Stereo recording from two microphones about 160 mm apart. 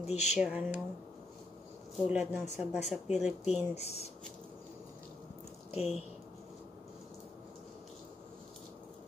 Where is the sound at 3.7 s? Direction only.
40° left (ahead or behind).